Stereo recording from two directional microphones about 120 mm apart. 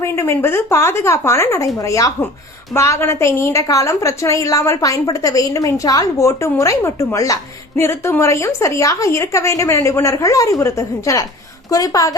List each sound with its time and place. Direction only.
0.0 s a woman's voice: 20° left (ahead or behind)